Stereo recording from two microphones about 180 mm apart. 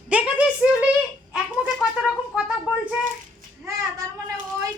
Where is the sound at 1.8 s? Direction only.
5° right (ahead or behind).